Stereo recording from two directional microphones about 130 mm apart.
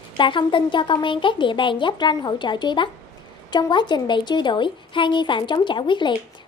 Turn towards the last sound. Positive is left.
turn(degrees=40)  # may be behind; listen again after turning